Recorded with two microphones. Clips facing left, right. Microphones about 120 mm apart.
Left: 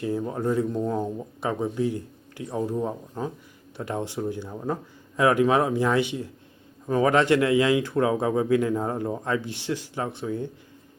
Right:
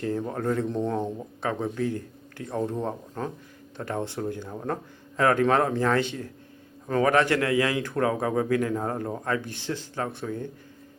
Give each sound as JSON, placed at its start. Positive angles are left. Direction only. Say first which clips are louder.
{"t": 0.0, "sound": "a man's voice", "louder": "left 1 dB", "side_deg": 10}